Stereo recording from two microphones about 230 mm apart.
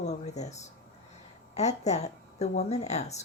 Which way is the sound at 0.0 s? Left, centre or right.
Left.